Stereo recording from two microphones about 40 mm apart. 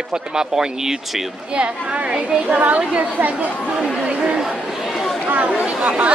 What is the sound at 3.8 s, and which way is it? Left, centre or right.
Speech, centre.